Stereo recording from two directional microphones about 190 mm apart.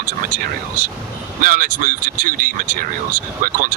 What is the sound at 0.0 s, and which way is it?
Speech, 45° right (ahead or behind).